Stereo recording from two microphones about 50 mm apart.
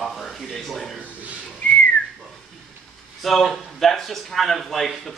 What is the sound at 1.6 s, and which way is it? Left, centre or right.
Whistling, left.